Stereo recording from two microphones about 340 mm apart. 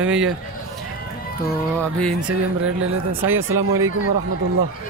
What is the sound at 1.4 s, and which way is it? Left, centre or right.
Speech, centre.